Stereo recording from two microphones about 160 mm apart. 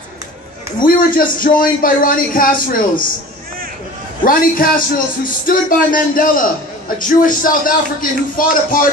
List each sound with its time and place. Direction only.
0.8 s a man's voice: 60° left (ahead or behind)
4.2 s a man's voice: 60° left (ahead or behind)